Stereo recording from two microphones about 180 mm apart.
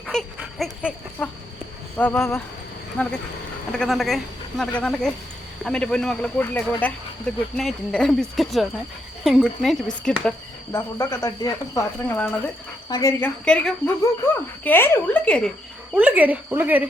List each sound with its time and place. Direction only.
0.1 s a child's voice: centre (ahead or behind)
10.7 s a child's voice: 15° left (ahead or behind)
16.0 s a woman's voice: 10° right (ahead or behind)